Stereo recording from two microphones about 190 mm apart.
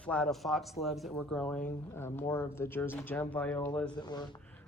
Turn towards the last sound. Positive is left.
turn(degrees=20)  # may be behind; listen again after turning